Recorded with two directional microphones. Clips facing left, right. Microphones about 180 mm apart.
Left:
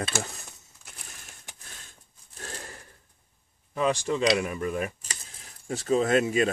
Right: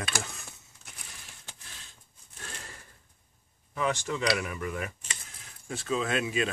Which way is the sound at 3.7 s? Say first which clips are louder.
Left 5 dB; 25° left (ahead or behind).